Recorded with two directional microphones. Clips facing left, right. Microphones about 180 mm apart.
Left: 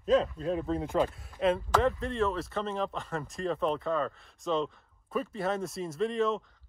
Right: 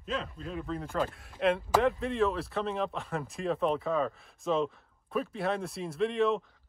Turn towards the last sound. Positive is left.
turn(degrees=0)  # may be behind; listen again after turning